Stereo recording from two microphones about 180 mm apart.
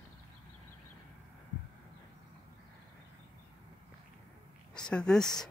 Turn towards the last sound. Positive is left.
turn(degrees=5)  # may be behind; listen again after turning